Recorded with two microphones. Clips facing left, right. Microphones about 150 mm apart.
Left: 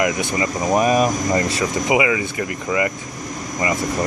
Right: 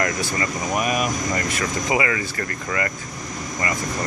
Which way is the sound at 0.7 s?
35° left (ahead or behind).